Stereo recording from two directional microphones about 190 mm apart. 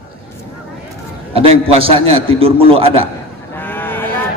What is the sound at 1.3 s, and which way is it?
A man's voice, 30° right (ahead or behind).